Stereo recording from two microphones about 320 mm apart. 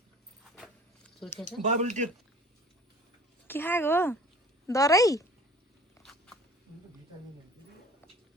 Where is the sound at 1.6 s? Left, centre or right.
Right.